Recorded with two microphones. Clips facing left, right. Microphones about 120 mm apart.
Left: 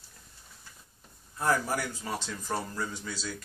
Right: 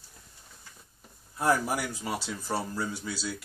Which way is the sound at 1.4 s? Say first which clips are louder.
Right 2 dB; 15° right (ahead or behind).